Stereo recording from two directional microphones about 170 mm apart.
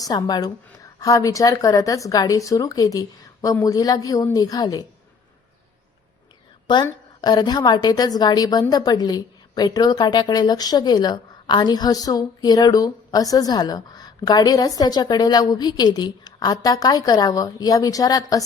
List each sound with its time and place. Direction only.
0.0 s a woman's voice: 20° left (ahead or behind)
6.8 s a woman's voice: 25° left (ahead or behind)